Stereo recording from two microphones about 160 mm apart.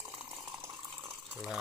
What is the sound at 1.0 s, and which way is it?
Ratchet, 15° right (ahead or behind).